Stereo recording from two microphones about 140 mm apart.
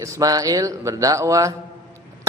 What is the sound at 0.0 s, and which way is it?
Mantra, 25° right (ahead or behind).